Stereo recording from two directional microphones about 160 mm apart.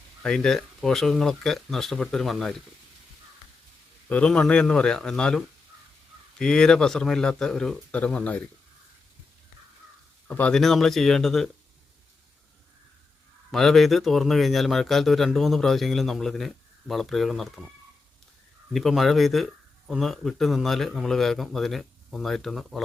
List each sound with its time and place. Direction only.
0.2 s speech: 5° left (ahead or behind)
4.1 s speech: 5° left (ahead or behind)
6.4 s speech: 5° left (ahead or behind)
10.2 s speech: 10° left (ahead or behind)
13.5 s speech: centre (ahead or behind)
18.7 s speech: centre (ahead or behind)